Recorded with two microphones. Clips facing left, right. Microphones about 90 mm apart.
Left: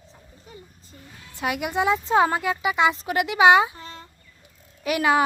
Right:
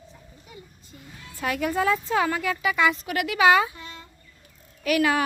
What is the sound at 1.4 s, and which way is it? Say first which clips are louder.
Speech: left 1 dB; 15° left (ahead or behind).